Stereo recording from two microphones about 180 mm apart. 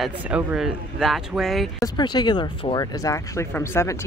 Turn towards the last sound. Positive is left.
turn(degrees=15)  # may be behind; listen again after turning